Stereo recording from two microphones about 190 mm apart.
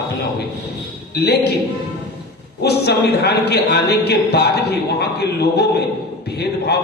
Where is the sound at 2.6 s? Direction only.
60° left (ahead or behind).